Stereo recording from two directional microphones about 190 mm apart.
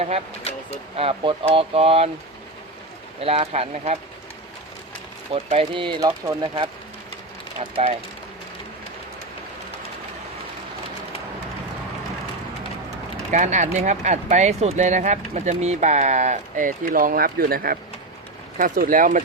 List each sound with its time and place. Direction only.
0.9 s speech: 30° right (ahead or behind)
3.2 s speech: 30° right (ahead or behind)
5.3 s speech: 30° right (ahead or behind)
13.3 s speech: 40° right (ahead or behind)